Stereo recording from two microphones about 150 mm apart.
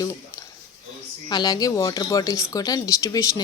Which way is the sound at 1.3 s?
25° left (ahead or behind).